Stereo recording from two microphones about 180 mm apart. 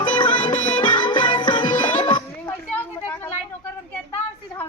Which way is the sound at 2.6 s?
10° left (ahead or behind).